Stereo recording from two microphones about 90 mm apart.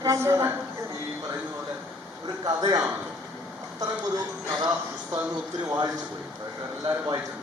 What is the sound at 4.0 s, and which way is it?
Speech, 50° right (ahead or behind).